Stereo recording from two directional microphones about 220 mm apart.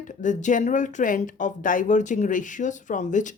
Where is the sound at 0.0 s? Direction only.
35° left (ahead or behind).